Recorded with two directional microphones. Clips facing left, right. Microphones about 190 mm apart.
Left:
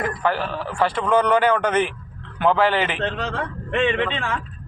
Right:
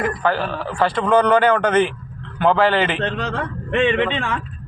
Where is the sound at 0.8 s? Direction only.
10° left (ahead or behind).